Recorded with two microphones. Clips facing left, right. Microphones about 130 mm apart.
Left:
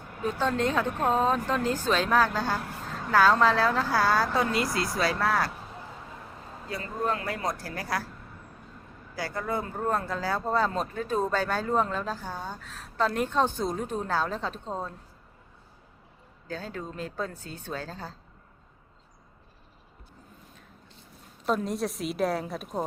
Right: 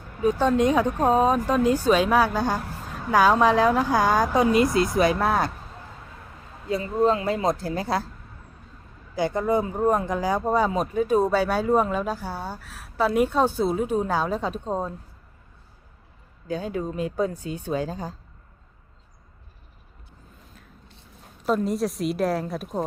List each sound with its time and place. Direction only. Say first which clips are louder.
0.2 s speech: right 7 dB; 15° right (ahead or behind)
6.7 s speech: right 9 dB; 25° right (ahead or behind)
9.1 s speech: right 9 dB; 20° right (ahead or behind)
16.5 s speech: right 8 dB; 15° right (ahead or behind)
21.4 s a woman's voice: right 4 dB; centre (ahead or behind)